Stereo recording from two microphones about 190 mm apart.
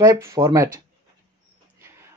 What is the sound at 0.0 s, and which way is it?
Speech, 15° right (ahead or behind).